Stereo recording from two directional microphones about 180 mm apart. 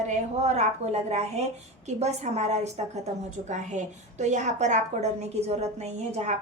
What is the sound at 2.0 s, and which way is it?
A woman's voice, 35° right (ahead or behind).